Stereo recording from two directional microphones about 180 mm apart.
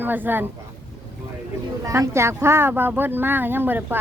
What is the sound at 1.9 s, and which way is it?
Speech, 15° right (ahead or behind).